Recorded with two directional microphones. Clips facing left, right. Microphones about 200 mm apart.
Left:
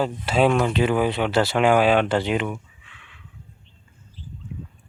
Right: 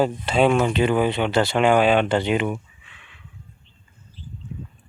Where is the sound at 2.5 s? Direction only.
20° right (ahead or behind).